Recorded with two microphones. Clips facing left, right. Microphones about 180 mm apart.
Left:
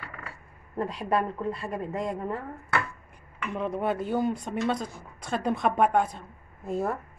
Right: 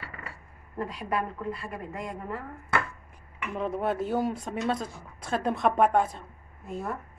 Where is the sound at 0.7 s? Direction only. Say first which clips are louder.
Left 4 dB; 30° left (ahead or behind).